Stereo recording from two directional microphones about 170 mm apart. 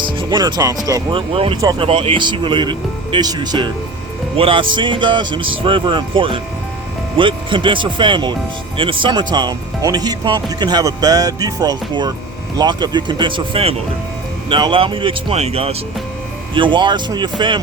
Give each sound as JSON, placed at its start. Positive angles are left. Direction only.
{"t": 0.0, "sound": "speech", "side_deg": -25}
{"t": 1.3, "sound": "speech", "side_deg": -35}